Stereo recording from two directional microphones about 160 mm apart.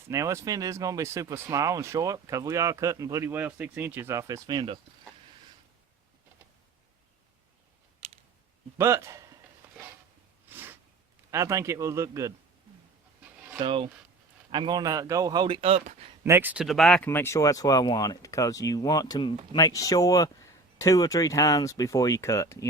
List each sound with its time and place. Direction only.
0.1 s speech: 20° right (ahead or behind)
8.8 s speech: 15° right (ahead or behind)
10.5 s a sound: 15° right (ahead or behind)
11.3 s a man's voice: 20° right (ahead or behind)
13.6 s speech: 35° right (ahead or behind)
16.2 s a man's voice: 15° right (ahead or behind)
16.6 s speech: centre (ahead or behind)
17.1 s speech: 15° left (ahead or behind)